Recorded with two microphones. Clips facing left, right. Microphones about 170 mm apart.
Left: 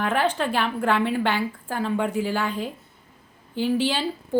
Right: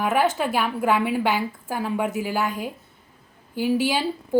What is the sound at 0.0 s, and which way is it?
A woman's voice, 10° right (ahead or behind).